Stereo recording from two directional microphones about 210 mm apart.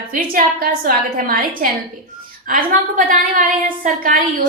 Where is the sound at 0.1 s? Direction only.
40° right (ahead or behind).